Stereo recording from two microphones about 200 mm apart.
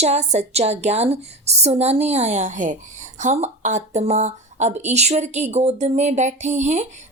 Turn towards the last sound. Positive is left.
turn(degrees=-35)  # may be behind; listen again after turning